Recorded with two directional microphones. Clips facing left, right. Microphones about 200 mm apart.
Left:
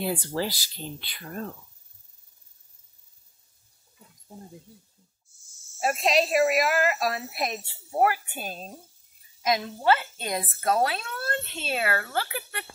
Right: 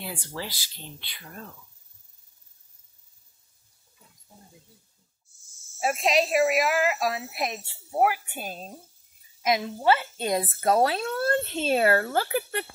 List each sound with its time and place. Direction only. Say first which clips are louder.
0.0 s speech: left 8 dB; 40° left (ahead or behind)
5.8 s speech: even; 5° right (ahead or behind)
9.4 s a woman's voice: right 1 dB; 20° right (ahead or behind)